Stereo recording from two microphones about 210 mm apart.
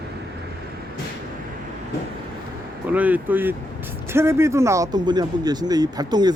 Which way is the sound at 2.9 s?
10° right (ahead or behind).